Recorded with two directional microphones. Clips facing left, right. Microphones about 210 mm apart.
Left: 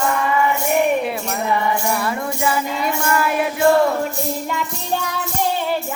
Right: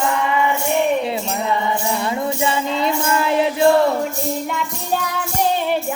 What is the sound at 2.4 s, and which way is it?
Music, 25° right (ahead or behind).